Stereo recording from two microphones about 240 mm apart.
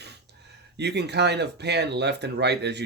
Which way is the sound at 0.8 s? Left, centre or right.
Right.